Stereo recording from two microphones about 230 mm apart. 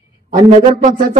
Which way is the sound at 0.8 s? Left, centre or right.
Right.